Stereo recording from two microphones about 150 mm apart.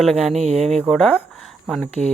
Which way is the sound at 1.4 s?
Centre (ahead or behind).